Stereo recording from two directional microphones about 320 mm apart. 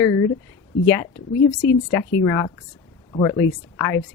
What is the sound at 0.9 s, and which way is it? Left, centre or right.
Speech, centre.